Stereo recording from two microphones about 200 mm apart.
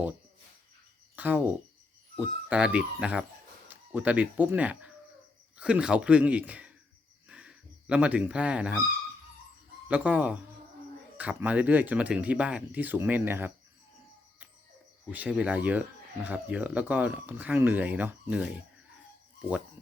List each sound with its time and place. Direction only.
1.1 s speech: 10° right (ahead or behind)
7.3 s dog: 5° right (ahead or behind)
9.9 s speech: 5° right (ahead or behind)
15.1 s speech: 5° right (ahead or behind)